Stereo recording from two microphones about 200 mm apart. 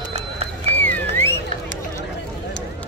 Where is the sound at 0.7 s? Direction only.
10° left (ahead or behind).